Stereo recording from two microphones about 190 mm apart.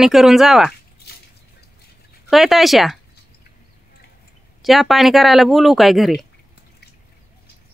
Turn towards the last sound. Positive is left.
turn(degrees=0)  # may be behind; listen again after turning